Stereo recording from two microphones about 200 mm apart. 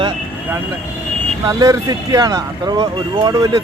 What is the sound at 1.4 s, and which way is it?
Speech, 20° right (ahead or behind).